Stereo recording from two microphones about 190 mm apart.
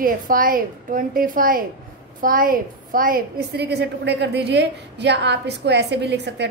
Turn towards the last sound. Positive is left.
turn(degrees=-65)  # may be behind; listen again after turning